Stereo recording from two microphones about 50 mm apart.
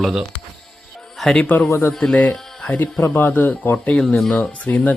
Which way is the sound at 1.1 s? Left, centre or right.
Centre.